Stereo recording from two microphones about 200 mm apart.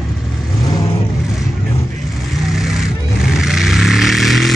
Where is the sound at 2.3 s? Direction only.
Centre (ahead or behind).